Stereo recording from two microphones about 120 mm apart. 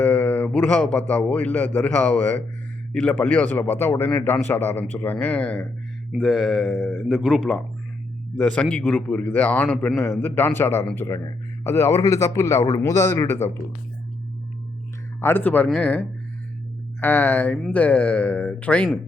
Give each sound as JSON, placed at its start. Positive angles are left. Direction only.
{"t": 0.0, "sound": "a man's voice", "side_deg": 15}
{"t": 6.1, "sound": "mantra", "side_deg": 0}
{"t": 8.4, "sound": "speech", "side_deg": 10}
{"t": 11.0, "sound": "a man's voice", "side_deg": 30}
{"t": 15.2, "sound": "speech", "side_deg": 15}